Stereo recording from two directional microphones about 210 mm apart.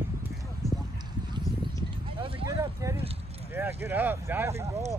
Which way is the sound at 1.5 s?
15° left (ahead or behind).